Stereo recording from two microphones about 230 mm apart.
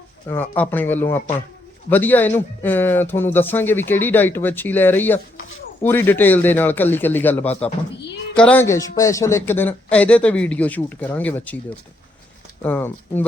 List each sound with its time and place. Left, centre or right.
0.3 s speech: centre